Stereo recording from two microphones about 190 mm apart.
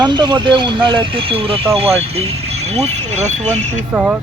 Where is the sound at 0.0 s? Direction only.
25° right (ahead or behind).